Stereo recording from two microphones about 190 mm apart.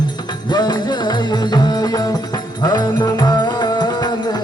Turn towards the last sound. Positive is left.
turn(degrees=25)  # may be behind; listen again after turning